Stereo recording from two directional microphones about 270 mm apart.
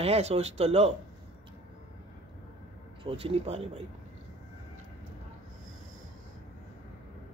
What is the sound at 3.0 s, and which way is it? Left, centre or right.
Speech, right.